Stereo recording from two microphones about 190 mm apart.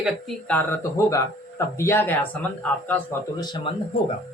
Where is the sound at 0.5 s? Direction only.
10° left (ahead or behind).